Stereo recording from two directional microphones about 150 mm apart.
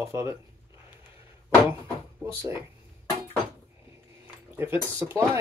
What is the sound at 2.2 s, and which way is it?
Speech, 20° right (ahead or behind).